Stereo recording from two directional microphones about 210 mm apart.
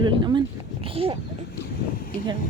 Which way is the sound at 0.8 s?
25° right (ahead or behind).